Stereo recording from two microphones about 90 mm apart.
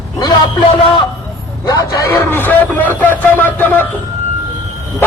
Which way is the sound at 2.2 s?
25° left (ahead or behind).